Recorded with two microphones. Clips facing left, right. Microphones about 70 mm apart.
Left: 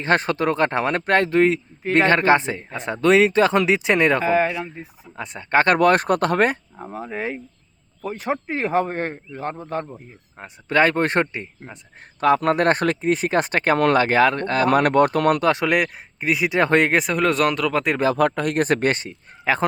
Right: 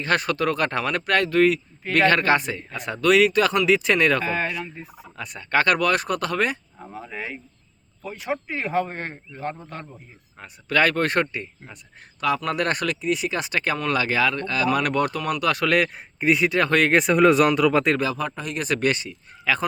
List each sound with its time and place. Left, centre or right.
0.0 s speech: left
12.2 s speech: left
15.4 s speech: left
16.2 s speech: centre
16.5 s speech: left
16.9 s speech: centre
18.2 s speech: left